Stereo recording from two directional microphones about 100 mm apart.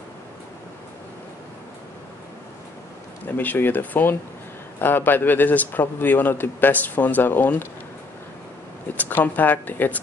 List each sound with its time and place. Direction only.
3.3 s a man's voice: 20° left (ahead or behind)
8.9 s speech: 15° left (ahead or behind)